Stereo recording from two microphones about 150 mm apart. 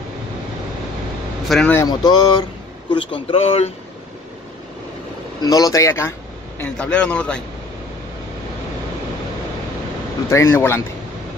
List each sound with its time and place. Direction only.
1.5 s speech: 5° left (ahead or behind)
1.8 s speech: 25° left (ahead or behind)
5.4 s speech: 25° left (ahead or behind)
6.6 s a man's voice: 10° left (ahead or behind)
10.3 s a man's voice: 15° left (ahead or behind)